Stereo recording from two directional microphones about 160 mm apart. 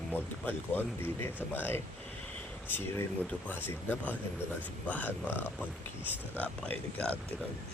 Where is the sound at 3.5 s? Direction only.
10° left (ahead or behind).